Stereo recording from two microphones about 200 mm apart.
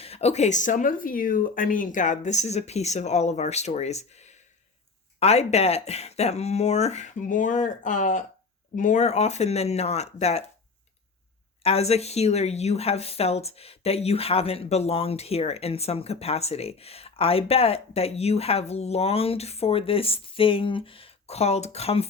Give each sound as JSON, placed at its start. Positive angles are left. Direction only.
{"t": 0.0, "sound": "a woman's voice", "side_deg": 30}
{"t": 11.6, "sound": "a woman's voice", "side_deg": 30}